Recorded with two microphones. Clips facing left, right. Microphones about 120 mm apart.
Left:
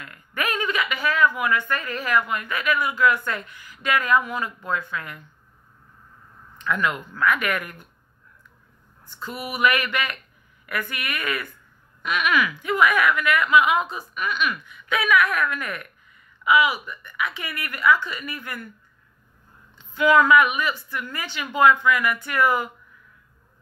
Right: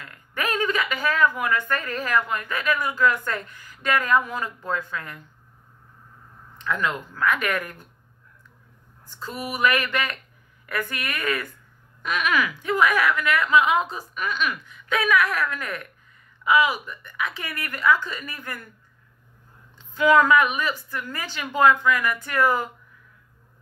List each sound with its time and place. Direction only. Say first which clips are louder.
0.0 s a sound: left 1 dB; 35° right (ahead or behind)
1.4 s a woman's voice: left 1 dB; 40° right (ahead or behind)
6.6 s a woman's voice: left 1 dB; 30° right (ahead or behind)
9.6 s a woman's voice: left 1 dB; 40° right (ahead or behind)
19.8 s a woman's voice: even; 40° right (ahead or behind)